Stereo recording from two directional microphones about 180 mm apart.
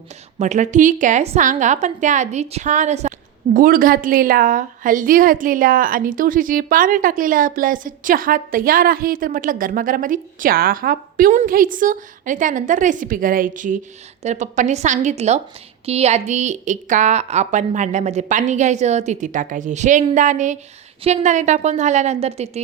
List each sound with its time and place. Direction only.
0.3 s a woman's voice: 40° right (ahead or behind)
3.5 s a woman's voice: 50° right (ahead or behind)